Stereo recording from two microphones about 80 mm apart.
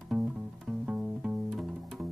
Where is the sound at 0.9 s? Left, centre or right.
Centre.